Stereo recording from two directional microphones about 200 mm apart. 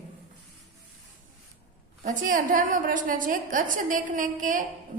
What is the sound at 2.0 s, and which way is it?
A woman's voice, 45° right (ahead or behind).